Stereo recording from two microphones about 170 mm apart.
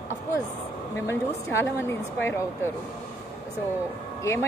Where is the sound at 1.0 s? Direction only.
15° left (ahead or behind).